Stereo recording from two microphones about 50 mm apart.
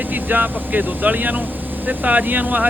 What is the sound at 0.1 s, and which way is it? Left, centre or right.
Speech, right.